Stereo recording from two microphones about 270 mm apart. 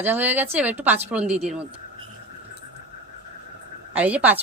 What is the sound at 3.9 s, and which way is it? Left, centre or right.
Speech, centre.